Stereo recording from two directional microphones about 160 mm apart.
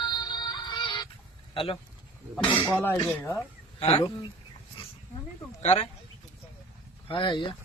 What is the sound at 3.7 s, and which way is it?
Speech, 35° left (ahead or behind).